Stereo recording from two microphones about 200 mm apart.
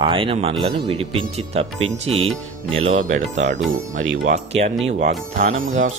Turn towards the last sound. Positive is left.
turn(degrees=-85)